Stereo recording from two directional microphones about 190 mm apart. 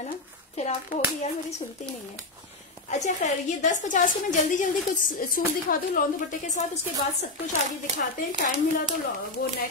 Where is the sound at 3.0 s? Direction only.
40° left (ahead or behind).